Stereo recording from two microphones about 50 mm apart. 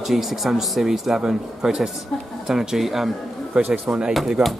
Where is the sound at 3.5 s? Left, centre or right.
Right.